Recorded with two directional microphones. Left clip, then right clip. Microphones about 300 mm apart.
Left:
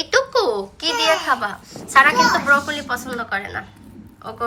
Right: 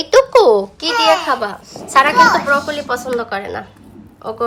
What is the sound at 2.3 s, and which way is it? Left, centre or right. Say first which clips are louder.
A woman's voice: right 2 dB; centre.